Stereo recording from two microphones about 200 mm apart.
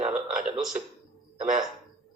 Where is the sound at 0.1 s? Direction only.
5° right (ahead or behind).